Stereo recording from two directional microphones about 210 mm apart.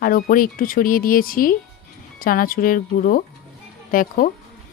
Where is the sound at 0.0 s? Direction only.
45° left (ahead or behind).